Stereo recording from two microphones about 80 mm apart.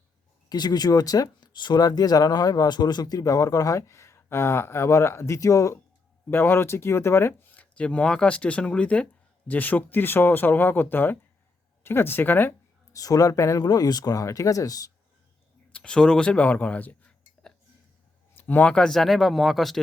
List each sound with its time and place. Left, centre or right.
0.4 s speech: left
6.3 s speech: left
7.5 s speech: centre
12.9 s speech: left
13.6 s speech: left
15.7 s speech: centre